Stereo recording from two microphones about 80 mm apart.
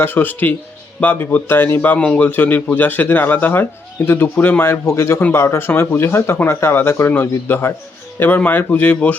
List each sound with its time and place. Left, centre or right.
0.0 s a man's voice: left